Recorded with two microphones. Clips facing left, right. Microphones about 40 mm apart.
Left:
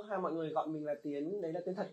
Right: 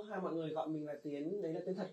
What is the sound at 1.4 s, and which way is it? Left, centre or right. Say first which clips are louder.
Speech: left 2 dB; left.